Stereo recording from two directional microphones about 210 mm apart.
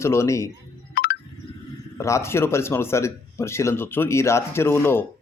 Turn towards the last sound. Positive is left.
turn(degrees=10)  # may be behind; listen again after turning